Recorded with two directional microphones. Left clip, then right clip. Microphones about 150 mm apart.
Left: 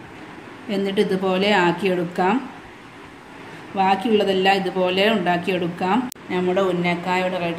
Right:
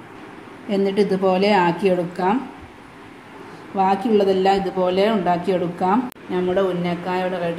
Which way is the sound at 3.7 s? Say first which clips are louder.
Even; 30° right (ahead or behind).